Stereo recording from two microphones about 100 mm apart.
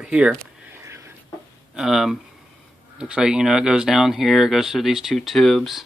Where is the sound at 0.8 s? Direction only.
30° right (ahead or behind).